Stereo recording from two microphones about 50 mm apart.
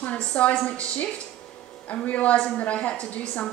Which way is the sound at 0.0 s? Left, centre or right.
Left.